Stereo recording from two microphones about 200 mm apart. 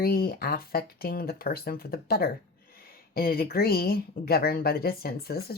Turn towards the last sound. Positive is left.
turn(degrees=50)  # may be behind; listen again after turning